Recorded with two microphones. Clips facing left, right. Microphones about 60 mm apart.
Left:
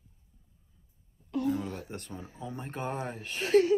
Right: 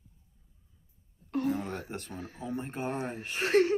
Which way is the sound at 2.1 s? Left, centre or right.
Right.